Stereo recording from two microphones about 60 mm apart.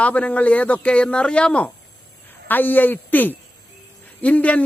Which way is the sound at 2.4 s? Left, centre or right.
Left.